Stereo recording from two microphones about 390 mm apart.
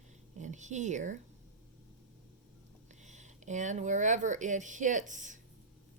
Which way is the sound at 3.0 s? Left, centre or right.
Centre.